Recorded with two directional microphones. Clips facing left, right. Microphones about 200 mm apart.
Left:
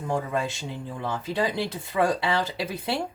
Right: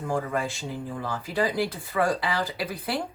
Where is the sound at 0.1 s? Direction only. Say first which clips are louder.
Left 1 dB; 20° left (ahead or behind).